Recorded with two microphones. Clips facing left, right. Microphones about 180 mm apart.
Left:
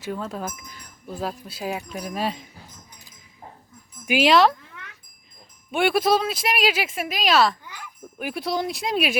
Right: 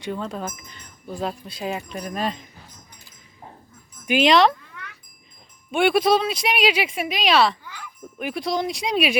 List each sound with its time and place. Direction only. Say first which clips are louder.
0.0 s speech: right 1 dB; 5° left (ahead or behind)
4.0 s speech: right 1 dB; 5° left (ahead or behind)
5.7 s speech: right 2 dB; centre (ahead or behind)
7.6 s a sound: right 1 dB; 15° left (ahead or behind)
8.2 s speech: right 1 dB; 5° left (ahead or behind)